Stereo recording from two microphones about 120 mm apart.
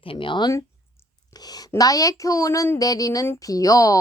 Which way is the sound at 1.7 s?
30° left (ahead or behind).